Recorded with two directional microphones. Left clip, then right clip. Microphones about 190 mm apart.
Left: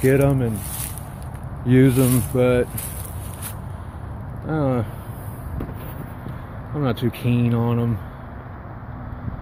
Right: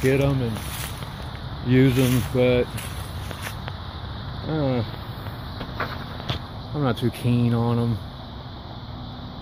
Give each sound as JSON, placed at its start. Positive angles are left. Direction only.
{"t": 0.0, "sound": "speech", "side_deg": 20}
{"t": 1.7, "sound": "speech", "side_deg": 10}
{"t": 4.5, "sound": "speech", "side_deg": 10}
{"t": 6.8, "sound": "speech", "side_deg": 0}